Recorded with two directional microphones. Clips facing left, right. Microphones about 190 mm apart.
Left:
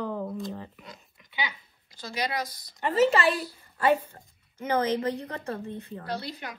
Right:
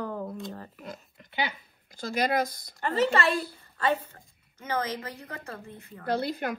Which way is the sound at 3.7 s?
15° left (ahead or behind).